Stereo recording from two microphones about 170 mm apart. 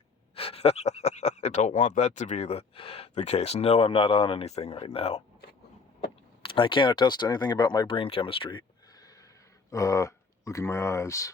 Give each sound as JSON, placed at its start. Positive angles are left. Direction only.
{"t": 0.3, "sound": "speech", "side_deg": 35}
{"t": 6.4, "sound": "speech", "side_deg": 30}